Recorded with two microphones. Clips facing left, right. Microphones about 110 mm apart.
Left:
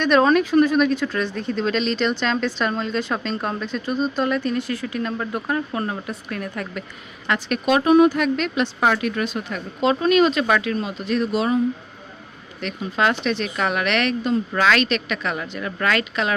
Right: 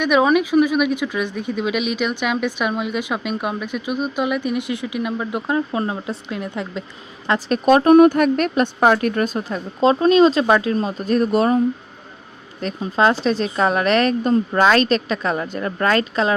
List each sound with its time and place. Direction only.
0.0 s speech: 10° right (ahead or behind)
7.3 s speech: 35° right (ahead or behind)
12.5 s speech: 35° right (ahead or behind)